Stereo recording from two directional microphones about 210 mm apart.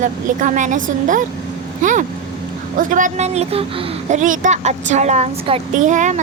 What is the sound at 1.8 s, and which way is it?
Vehicle, 40° right (ahead or behind).